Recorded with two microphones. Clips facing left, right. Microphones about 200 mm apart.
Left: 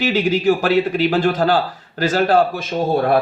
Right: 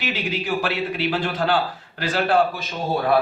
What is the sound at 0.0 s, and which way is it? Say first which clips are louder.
A man's voice: left 10 dB; 45° left (ahead or behind).